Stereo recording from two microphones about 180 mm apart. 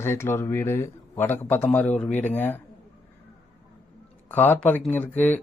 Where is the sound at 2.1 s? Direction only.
40° left (ahead or behind).